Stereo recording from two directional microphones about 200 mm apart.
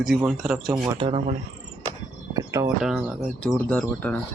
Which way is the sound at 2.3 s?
15° right (ahead or behind).